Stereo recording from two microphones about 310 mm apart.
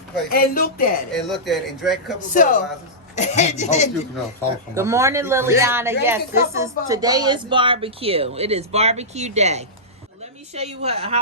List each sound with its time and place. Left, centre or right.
0.3 s speech: left
1.3 s a man's voice: centre
2.3 s speech: left
4.7 s a man's voice: centre